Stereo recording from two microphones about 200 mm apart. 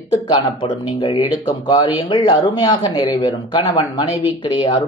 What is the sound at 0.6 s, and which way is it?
Speech, 25° left (ahead or behind).